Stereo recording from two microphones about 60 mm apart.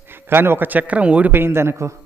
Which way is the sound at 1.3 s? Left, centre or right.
Right.